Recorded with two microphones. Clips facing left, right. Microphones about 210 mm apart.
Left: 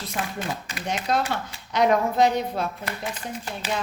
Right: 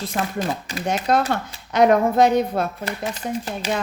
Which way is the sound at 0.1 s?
45° right (ahead or behind).